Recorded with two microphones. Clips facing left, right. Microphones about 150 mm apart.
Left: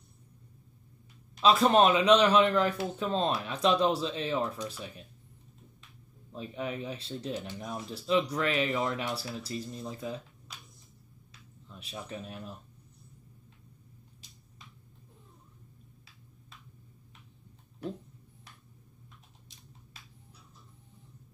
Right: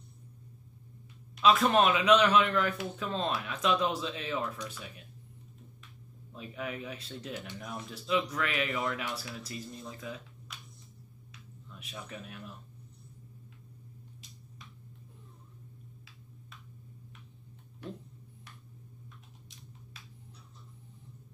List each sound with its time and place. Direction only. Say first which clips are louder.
1.4 s a man's voice: left 2 dB; 30° left (ahead or behind)
6.3 s a man's voice: left 3 dB; 30° left (ahead or behind)
11.7 s a man's voice: left 4 dB; 30° left (ahead or behind)